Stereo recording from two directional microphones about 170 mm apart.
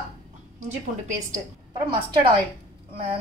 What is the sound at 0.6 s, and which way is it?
Speech, 45° right (ahead or behind).